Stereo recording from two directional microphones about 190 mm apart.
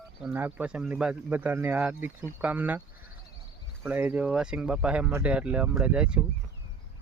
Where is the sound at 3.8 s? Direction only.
10° right (ahead or behind).